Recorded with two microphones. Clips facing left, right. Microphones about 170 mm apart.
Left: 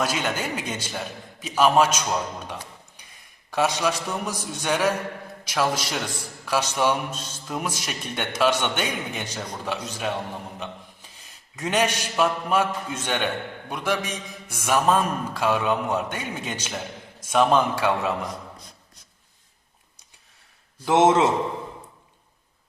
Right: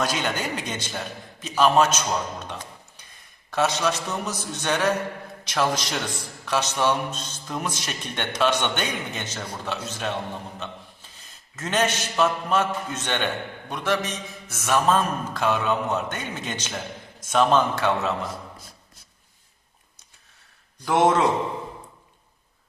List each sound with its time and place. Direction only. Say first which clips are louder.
0.0 s a man's voice: even; 5° left (ahead or behind)
3.5 s a man's voice: even; 10° left (ahead or behind)
20.8 s a man's voice: left 2 dB; 20° left (ahead or behind)